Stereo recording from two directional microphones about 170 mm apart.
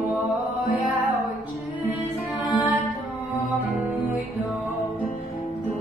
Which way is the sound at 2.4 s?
30° left (ahead or behind).